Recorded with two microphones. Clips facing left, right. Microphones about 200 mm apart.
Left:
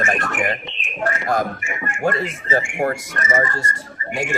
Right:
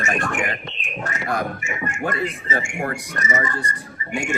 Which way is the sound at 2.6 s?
45° right (ahead or behind).